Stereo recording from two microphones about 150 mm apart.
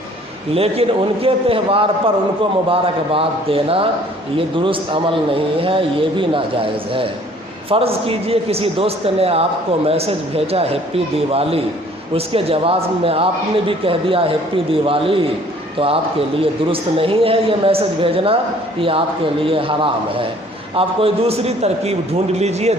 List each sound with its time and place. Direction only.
0.5 s a man's voice: 40° right (ahead or behind)
7.7 s a man's voice: 40° right (ahead or behind)
16.4 s a man's voice: 40° right (ahead or behind)